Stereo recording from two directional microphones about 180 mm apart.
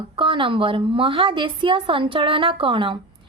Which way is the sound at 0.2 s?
30° right (ahead or behind).